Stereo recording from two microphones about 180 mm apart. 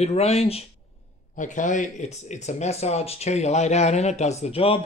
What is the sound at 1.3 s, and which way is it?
A man's voice, 45° left (ahead or behind).